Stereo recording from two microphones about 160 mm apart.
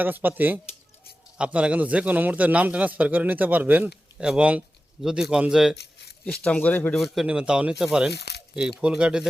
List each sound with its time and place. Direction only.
0.0 s a man's voice: 10° right (ahead or behind)
5.7 s a sound: 90° left
6.2 s speech: 5° left (ahead or behind)
7.0 s speech: 5° right (ahead or behind)